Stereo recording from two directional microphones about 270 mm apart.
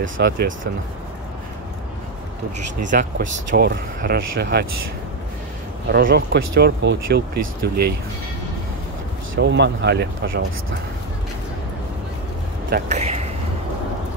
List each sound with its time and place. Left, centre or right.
0.0 s speech: right
2.8 s speech: right
5.9 s speech: right
9.3 s speech: right
12.7 s speech: right